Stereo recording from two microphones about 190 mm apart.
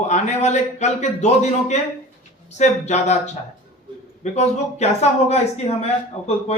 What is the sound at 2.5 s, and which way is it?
Speech, 35° left (ahead or behind).